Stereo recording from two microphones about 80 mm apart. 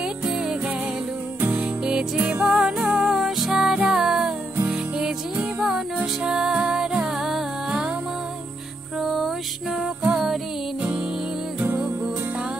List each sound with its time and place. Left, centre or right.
0.0 s music: centre
9.0 s music: centre